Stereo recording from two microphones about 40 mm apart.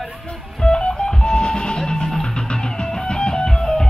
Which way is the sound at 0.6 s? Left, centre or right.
Left.